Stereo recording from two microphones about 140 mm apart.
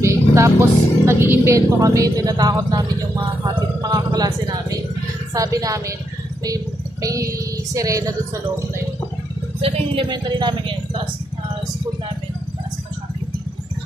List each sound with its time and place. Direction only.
0.0 s a woman's voice: 20° right (ahead or behind)
9.6 s speech: 40° right (ahead or behind)